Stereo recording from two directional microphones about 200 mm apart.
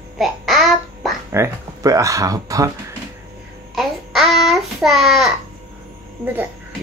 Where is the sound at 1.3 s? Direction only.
15° right (ahead or behind).